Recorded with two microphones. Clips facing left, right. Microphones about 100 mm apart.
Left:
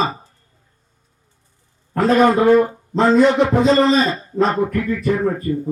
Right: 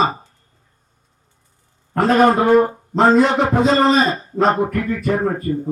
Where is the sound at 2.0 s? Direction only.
35° right (ahead or behind).